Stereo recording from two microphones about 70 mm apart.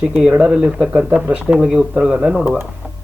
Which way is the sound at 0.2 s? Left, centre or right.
Centre.